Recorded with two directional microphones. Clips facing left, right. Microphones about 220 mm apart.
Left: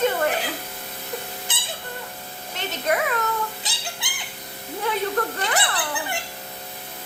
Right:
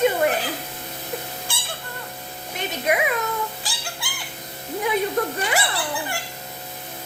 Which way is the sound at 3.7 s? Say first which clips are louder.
Right 1 dB; 20° left (ahead or behind).